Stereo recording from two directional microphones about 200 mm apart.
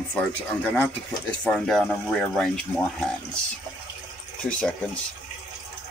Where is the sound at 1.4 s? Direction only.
5° left (ahead or behind).